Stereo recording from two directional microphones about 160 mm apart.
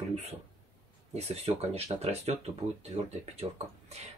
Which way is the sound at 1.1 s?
40° right (ahead or behind).